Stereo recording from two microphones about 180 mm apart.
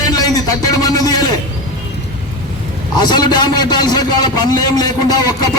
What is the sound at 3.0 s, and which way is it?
A man's voice, 20° left (ahead or behind).